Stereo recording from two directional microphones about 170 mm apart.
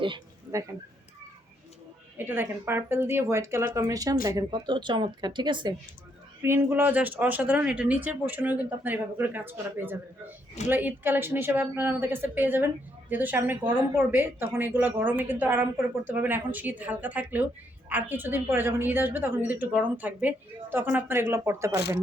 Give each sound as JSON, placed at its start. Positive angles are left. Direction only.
{"t": 2.1, "sound": "speech", "side_deg": -10}
{"t": 6.4, "sound": "speech", "side_deg": -15}
{"t": 21.8, "sound": "speech", "side_deg": 75}